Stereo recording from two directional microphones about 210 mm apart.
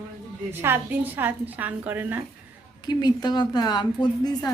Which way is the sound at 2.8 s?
20° left (ahead or behind).